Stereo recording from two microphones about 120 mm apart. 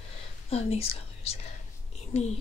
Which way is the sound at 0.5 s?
60° left (ahead or behind).